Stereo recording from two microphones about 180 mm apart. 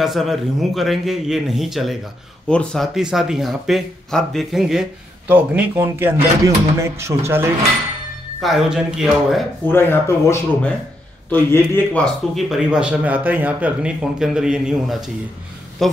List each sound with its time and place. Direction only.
0.0 s speech: centre (ahead or behind)
8.4 s speech: centre (ahead or behind)
9.7 s speech: 10° left (ahead or behind)